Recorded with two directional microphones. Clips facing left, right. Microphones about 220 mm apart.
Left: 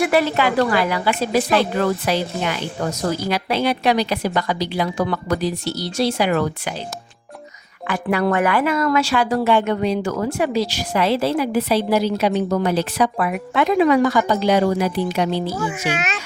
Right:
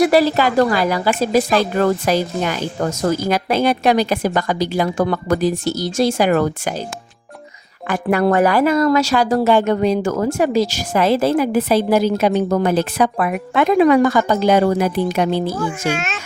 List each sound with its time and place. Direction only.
0.0 s a woman's voice: 35° right (ahead or behind)
7.9 s speech: 45° right (ahead or behind)
16.0 s a child's voice: centre (ahead or behind)